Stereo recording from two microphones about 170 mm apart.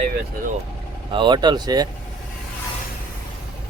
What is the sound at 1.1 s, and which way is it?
Speech, 25° right (ahead or behind).